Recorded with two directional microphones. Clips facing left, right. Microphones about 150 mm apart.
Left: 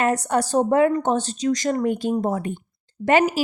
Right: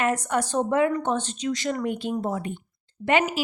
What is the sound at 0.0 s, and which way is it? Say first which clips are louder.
A woman's voice: left 3 dB; 35° left (ahead or behind).